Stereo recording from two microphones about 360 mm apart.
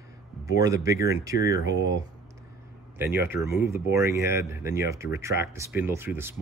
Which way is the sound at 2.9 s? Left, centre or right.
Centre.